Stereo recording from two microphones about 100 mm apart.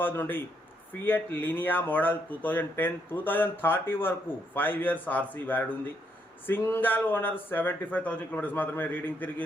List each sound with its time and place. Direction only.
0.0 s speech: 20° left (ahead or behind)